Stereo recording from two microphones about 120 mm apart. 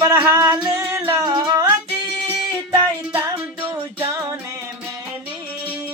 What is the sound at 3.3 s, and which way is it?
Music, 25° right (ahead or behind).